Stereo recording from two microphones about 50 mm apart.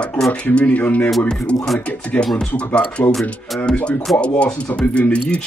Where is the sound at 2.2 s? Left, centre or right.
Left.